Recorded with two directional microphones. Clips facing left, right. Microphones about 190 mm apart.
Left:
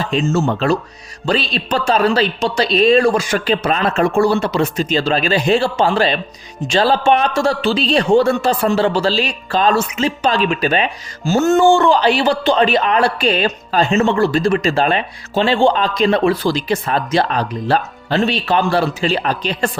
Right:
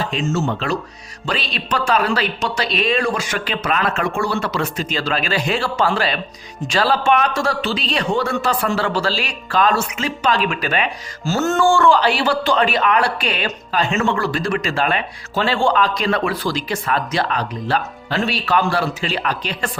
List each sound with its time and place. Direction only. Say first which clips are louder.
0.1 s speech: left 4 dB; 35° left (ahead or behind)
4.4 s a man's voice: left 5 dB; 20° left (ahead or behind)